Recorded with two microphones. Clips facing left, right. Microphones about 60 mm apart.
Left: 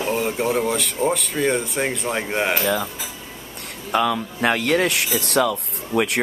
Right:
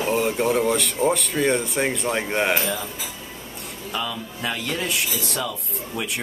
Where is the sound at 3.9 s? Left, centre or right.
Left.